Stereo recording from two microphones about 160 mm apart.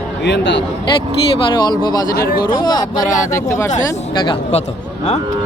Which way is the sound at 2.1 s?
70° left (ahead or behind).